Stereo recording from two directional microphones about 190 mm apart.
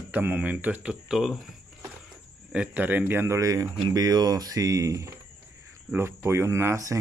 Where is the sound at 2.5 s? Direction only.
5° right (ahead or behind).